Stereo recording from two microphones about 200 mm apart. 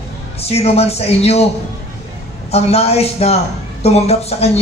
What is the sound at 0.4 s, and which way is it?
A man's voice, 30° left (ahead or behind).